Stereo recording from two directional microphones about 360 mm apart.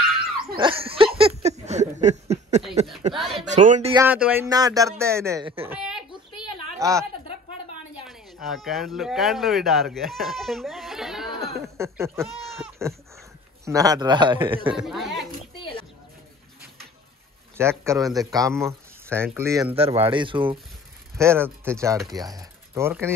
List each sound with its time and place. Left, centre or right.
0.6 s a sound: centre
3.0 s a woman's voice: centre
14.8 s speech: centre
17.6 s speech: centre